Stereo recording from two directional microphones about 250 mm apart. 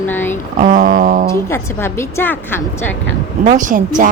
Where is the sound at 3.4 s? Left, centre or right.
Right.